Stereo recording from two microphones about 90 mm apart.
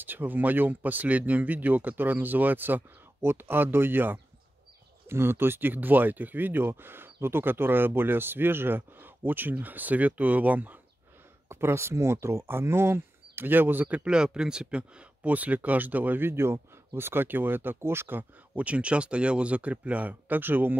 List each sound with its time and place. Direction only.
0.0 s speech: 20° right (ahead or behind)
11.4 s speech: 30° right (ahead or behind)